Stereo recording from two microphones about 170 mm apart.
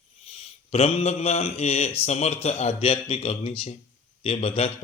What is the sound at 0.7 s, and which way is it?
Speech, 35° left (ahead or behind).